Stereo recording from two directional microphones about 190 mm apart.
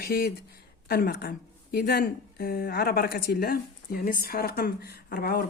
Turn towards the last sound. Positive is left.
turn(degrees=50)  # may be behind; listen again after turning